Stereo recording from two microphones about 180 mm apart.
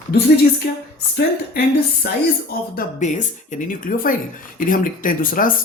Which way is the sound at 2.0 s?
60° left (ahead or behind).